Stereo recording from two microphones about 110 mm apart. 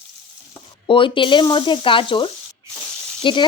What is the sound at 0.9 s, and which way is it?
Speech, 50° left (ahead or behind).